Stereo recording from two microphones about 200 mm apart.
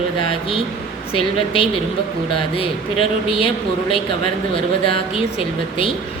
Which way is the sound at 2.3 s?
25° left (ahead or behind).